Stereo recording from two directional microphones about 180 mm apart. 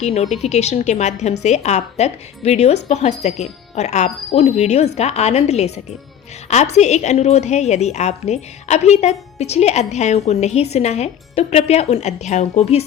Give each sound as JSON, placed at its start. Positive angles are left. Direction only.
{"t": 0.0, "sound": "a woman's voice", "side_deg": 35}